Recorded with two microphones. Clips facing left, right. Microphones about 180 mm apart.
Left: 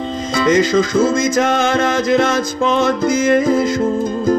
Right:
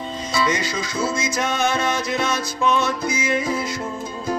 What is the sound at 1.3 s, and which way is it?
Music, 90° left.